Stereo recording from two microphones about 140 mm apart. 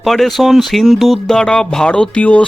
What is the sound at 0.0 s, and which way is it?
Speech, centre (ahead or behind).